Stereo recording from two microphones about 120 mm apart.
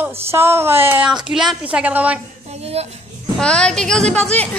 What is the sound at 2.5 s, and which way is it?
Speech, 60° right (ahead or behind).